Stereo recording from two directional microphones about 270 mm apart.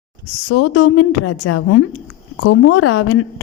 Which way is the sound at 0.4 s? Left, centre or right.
Left.